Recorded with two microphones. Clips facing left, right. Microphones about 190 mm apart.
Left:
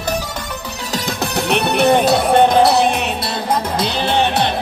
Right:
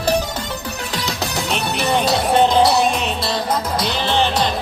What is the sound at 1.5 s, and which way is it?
Music, 55° left (ahead or behind).